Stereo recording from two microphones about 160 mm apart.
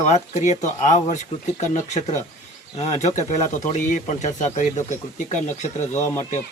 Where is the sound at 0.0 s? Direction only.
45° left (ahead or behind).